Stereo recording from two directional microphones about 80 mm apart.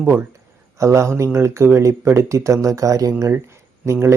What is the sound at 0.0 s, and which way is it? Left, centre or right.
Speech, right.